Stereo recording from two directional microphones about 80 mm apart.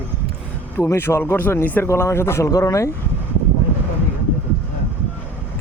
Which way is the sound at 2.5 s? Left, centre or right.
Left.